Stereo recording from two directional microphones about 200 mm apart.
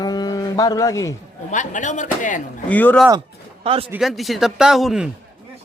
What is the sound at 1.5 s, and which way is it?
Speech, 40° left (ahead or behind).